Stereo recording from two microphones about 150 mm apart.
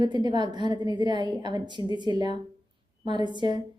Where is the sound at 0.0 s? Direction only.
30° right (ahead or behind).